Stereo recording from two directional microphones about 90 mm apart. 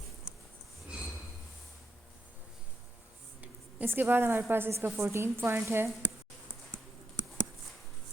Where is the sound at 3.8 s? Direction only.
25° right (ahead or behind).